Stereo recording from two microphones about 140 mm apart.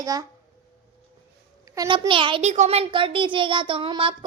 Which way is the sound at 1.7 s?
30° right (ahead or behind).